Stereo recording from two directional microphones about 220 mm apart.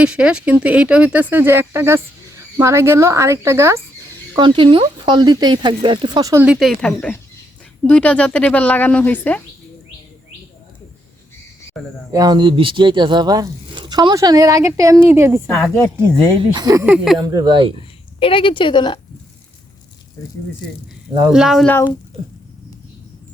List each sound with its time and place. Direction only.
0.0 s speech: 5° right (ahead or behind)
6.4 s speech: centre (ahead or behind)
11.8 s speech: 5° right (ahead or behind)
12.1 s speech: 20° right (ahead or behind)
16.9 s speech: centre (ahead or behind)
17.2 s speech: 20° right (ahead or behind)
17.7 s speech: 25° left (ahead or behind)
21.2 s speech: 5° right (ahead or behind)